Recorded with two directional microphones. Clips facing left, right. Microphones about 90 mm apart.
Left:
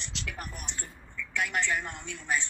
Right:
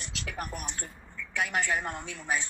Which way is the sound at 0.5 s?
50° right (ahead or behind).